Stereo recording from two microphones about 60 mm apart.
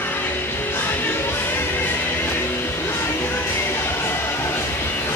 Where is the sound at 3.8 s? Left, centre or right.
Left.